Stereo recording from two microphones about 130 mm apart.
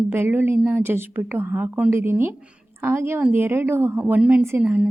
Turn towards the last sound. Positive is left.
turn(degrees=-10)  # may be behind; listen again after turning